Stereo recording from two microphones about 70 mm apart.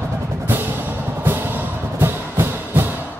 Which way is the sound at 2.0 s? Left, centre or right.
Right.